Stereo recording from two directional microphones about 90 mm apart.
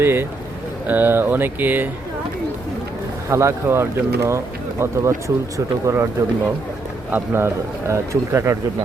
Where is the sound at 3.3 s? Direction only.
30° right (ahead or behind).